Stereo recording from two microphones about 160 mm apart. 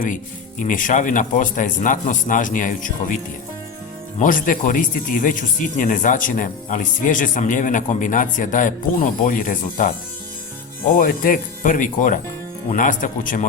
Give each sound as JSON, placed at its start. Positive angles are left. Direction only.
{"t": 0.6, "sound": "speech", "side_deg": 55}
{"t": 4.2, "sound": "speech", "side_deg": 55}
{"t": 10.9, "sound": "speech", "side_deg": 60}